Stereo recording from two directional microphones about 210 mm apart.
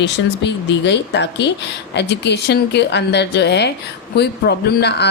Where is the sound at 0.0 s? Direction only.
55° left (ahead or behind).